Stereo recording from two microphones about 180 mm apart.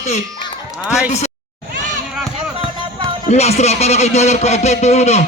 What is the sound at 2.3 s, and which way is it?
Music, 30° right (ahead or behind).